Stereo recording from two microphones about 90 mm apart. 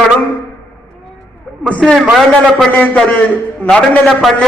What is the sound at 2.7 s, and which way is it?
Speech, 15° left (ahead or behind).